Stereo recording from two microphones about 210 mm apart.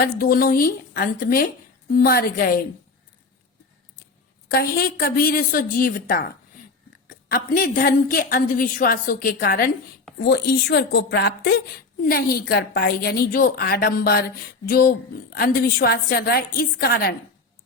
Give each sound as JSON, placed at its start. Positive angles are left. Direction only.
{"t": 0.0, "sound": "a woman's voice", "side_deg": 45}
{"t": 4.4, "sound": "a woman's voice", "side_deg": 45}